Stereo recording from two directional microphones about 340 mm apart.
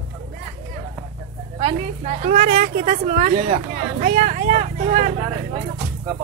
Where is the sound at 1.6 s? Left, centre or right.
Centre.